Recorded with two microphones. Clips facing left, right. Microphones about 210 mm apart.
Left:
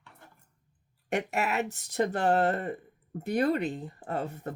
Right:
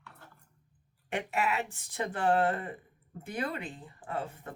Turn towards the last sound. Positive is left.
turn(degrees=40)  # may be behind; listen again after turning